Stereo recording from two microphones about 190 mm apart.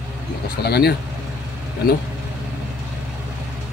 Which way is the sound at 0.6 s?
60° left (ahead or behind).